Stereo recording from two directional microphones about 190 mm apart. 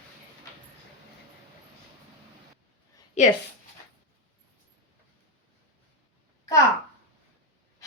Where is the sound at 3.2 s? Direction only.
35° left (ahead or behind).